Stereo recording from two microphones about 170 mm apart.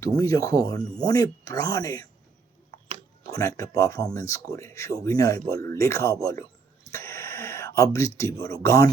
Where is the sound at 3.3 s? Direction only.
20° left (ahead or behind).